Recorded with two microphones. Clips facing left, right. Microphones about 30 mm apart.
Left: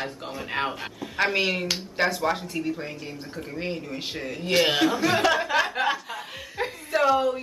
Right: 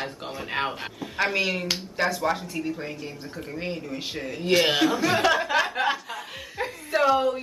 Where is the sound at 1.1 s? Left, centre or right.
Centre.